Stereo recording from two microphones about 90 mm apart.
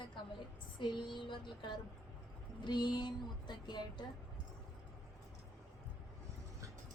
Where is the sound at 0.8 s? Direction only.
60° left (ahead or behind).